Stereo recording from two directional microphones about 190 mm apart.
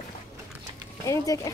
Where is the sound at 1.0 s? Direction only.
15° left (ahead or behind).